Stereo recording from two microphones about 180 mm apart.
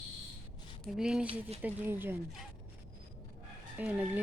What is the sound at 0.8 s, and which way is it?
A woman's voice, centre (ahead or behind).